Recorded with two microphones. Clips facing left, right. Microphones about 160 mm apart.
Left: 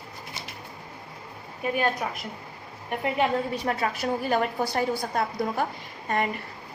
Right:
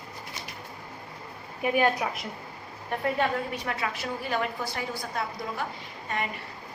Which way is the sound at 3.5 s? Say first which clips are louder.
Left 4 dB; 35° left (ahead or behind).